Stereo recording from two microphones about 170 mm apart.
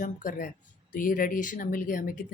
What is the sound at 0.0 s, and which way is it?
Speech, 55° left (ahead or behind).